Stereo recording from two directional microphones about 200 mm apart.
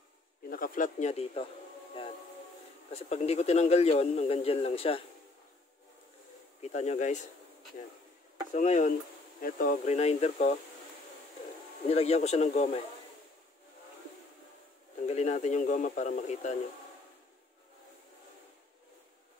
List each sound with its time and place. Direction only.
0.5 s speech: 45° left (ahead or behind)
2.0 s music: 25° left (ahead or behind)
2.9 s speech: 30° left (ahead or behind)
6.6 s speech: 35° left (ahead or behind)
8.5 s speech: 40° left (ahead or behind)
11.9 s speech: 30° left (ahead or behind)
15.0 s speech: 35° left (ahead or behind)